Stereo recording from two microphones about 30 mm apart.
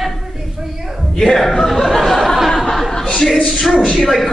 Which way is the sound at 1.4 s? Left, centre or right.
Centre.